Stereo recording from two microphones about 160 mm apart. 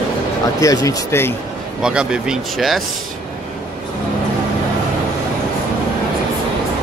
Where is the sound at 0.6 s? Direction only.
20° left (ahead or behind).